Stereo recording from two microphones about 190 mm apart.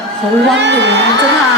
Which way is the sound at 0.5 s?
65° right (ahead or behind).